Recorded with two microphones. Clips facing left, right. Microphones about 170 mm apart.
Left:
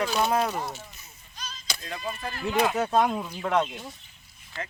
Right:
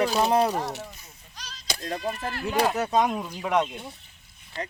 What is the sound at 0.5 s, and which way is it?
Speech, 75° right (ahead or behind).